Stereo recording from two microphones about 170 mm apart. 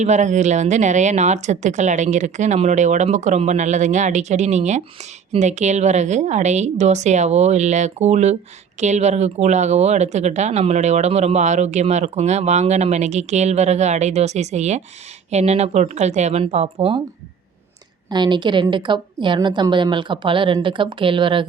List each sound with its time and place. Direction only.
0.0 s speech: 45° right (ahead or behind)
18.1 s a woman's voice: 25° right (ahead or behind)